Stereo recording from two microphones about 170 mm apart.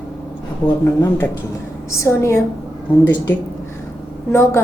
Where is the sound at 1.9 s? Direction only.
15° left (ahead or behind).